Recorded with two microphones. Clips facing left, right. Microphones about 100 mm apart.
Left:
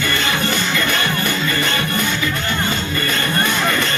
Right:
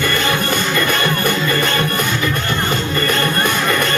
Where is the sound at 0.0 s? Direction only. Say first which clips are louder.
Right 2 dB; 45° right (ahead or behind).